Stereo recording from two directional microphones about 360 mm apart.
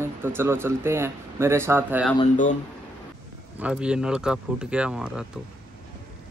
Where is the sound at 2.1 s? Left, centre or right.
Centre.